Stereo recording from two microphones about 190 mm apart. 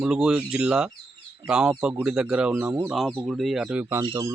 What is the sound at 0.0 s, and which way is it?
Speech, 5° right (ahead or behind).